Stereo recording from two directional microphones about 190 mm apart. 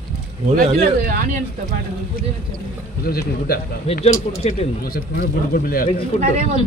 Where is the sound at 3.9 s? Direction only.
30° left (ahead or behind).